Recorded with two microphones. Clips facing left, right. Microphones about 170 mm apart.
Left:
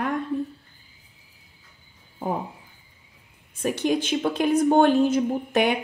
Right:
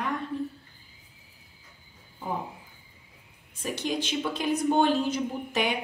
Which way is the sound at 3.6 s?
55° left (ahead or behind).